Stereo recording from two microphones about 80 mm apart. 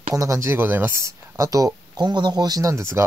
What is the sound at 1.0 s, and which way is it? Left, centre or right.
Speech, right.